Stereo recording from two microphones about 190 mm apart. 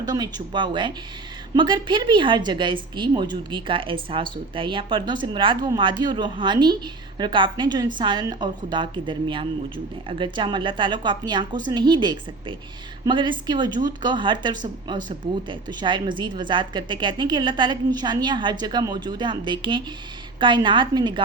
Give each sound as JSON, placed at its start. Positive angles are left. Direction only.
{"t": 0.0, "sound": "a woman's voice", "side_deg": -20}